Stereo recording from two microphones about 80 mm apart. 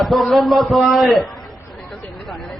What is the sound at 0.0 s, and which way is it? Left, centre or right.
A man's voice, centre.